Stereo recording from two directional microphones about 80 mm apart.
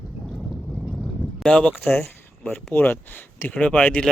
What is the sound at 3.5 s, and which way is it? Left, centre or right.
Speech, centre.